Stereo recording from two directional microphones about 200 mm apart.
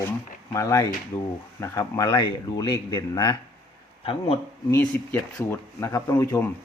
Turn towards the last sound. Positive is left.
turn(degrees=10)  # may be behind; listen again after turning